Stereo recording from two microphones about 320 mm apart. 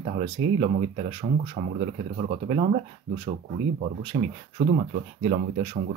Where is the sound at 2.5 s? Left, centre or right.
Centre.